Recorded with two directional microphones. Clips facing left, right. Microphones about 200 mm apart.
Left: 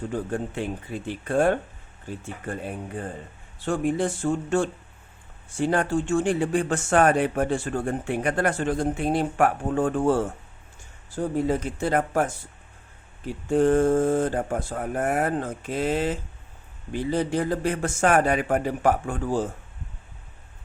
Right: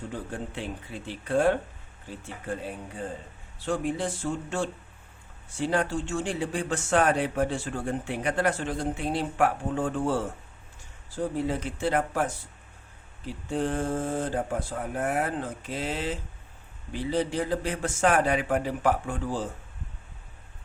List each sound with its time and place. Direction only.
0.1 s speech: 50° left (ahead or behind)
3.7 s speech: 50° left (ahead or behind)
11.4 s speech: 45° left (ahead or behind)
13.5 s speech: 50° left (ahead or behind)